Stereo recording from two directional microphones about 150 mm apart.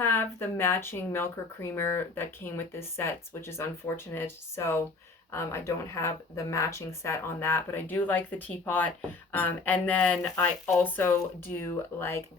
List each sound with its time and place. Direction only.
0.0 s speech: 15° left (ahead or behind)